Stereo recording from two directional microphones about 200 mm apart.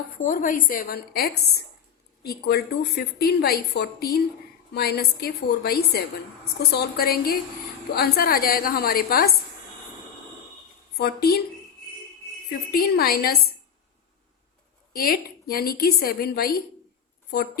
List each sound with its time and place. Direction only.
0.2 s a woman's voice: 40° left (ahead or behind)
10.9 s a woman's voice: 50° left (ahead or behind)
12.7 s a woman's voice: 50° left (ahead or behind)
14.9 s a woman's voice: 45° left (ahead or behind)